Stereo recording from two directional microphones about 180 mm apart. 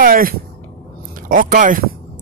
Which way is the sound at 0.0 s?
50° right (ahead or behind).